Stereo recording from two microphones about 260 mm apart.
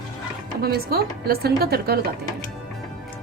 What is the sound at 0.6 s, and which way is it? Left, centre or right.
A woman's voice, right.